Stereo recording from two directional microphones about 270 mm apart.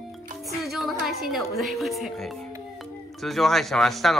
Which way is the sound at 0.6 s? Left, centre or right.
Centre.